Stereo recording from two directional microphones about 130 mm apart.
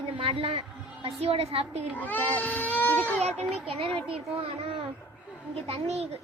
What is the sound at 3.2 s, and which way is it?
A child's voice, 55° right (ahead or behind).